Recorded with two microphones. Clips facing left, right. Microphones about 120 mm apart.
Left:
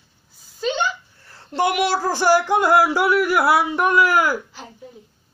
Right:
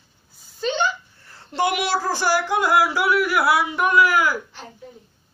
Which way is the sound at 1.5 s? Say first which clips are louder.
Left 2 dB; 40° left (ahead or behind).